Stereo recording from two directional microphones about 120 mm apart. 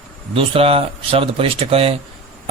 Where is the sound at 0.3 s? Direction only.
55° right (ahead or behind).